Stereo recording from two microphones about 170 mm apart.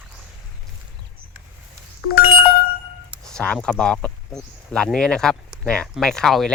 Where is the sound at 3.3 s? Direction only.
5° left (ahead or behind).